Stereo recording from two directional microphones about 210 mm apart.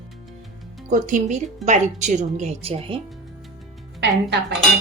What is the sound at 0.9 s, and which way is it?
A woman's voice, 35° right (ahead or behind).